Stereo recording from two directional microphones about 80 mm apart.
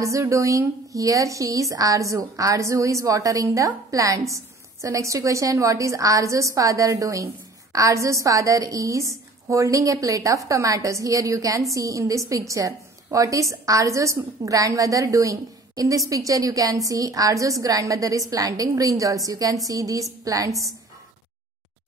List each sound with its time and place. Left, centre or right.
0.0 s a woman's voice: right